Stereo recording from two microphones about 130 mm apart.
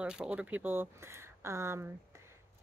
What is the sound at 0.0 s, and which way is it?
Speech, 10° right (ahead or behind).